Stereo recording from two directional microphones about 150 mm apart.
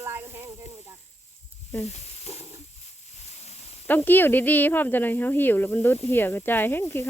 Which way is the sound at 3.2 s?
45° left (ahead or behind).